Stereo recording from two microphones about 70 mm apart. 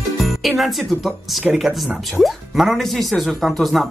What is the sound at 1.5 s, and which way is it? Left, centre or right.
A woman's voice, centre.